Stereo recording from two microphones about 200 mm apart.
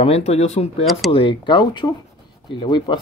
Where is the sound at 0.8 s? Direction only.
Centre (ahead or behind).